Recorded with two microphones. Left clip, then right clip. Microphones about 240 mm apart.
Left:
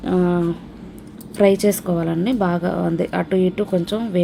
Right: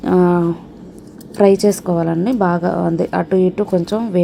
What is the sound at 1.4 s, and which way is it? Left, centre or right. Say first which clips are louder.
A woman's voice: right 3 dB; centre.